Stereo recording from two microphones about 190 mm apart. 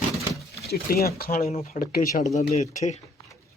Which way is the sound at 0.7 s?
55° left (ahead or behind).